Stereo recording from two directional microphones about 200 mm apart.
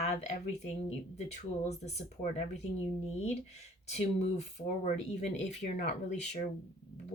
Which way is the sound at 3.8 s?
35° left (ahead or behind).